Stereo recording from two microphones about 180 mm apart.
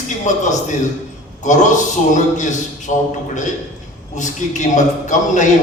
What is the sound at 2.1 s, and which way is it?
Speech, 40° left (ahead or behind).